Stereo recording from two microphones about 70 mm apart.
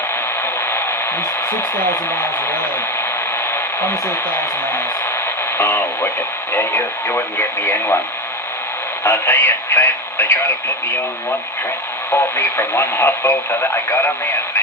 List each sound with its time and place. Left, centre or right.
1.5 s speech: left
3.5 s a sound: left
5.5 s speech: left
9.0 s speech: left
12.1 s speech: left